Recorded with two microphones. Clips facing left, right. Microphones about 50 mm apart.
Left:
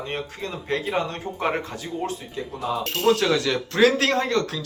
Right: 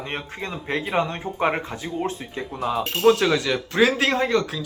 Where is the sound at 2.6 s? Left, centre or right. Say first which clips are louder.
Right 3 dB; centre.